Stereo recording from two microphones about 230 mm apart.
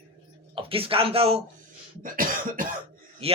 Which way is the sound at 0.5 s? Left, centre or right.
Right.